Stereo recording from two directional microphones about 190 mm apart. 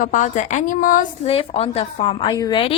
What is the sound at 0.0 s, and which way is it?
A woman's voice, 40° left (ahead or behind).